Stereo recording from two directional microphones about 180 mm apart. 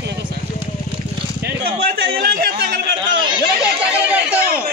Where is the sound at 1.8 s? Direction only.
65° right (ahead or behind).